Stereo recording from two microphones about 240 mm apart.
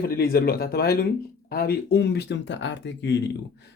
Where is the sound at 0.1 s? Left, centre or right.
Left.